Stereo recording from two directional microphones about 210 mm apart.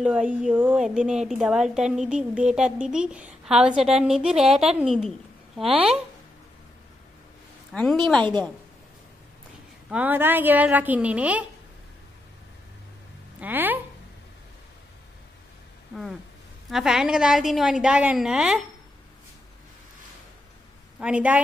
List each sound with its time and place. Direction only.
0.0 s a woman's voice: 5° right (ahead or behind)
7.7 s speech: centre (ahead or behind)
8.2 s a woman's voice: 20° right (ahead or behind)
9.8 s a woman's voice: 5° right (ahead or behind)
13.4 s a woman's voice: 10° right (ahead or behind)
16.7 s a woman's voice: centre (ahead or behind)
21.0 s a woman's voice: 5° right (ahead or behind)